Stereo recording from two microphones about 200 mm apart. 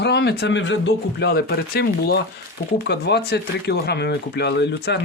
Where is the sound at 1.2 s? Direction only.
50° left (ahead or behind).